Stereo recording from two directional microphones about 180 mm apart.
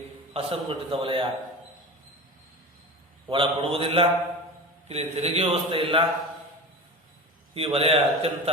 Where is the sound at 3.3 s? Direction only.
30° right (ahead or behind).